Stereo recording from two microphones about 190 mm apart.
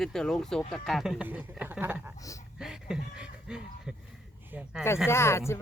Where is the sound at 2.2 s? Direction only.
15° left (ahead or behind).